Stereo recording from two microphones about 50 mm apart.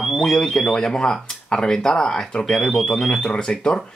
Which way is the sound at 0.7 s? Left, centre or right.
Centre.